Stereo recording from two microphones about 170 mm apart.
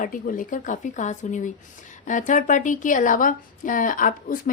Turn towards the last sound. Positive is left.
turn(degrees=50)  # may be behind; listen again after turning